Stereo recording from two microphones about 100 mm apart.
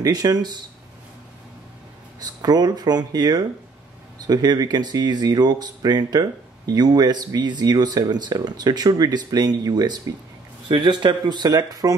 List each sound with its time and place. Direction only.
0.0 s speech: 40° right (ahead or behind)
2.1 s speech: 45° right (ahead or behind)